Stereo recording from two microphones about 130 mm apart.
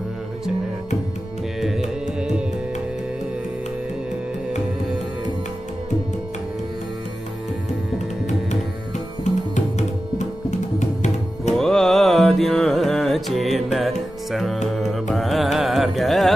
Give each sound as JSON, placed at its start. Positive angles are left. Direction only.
{"t": 1.6, "sound": "music", "side_deg": 0}
{"t": 10.8, "sound": "music", "side_deg": 65}
{"t": 11.5, "sound": "music", "side_deg": 5}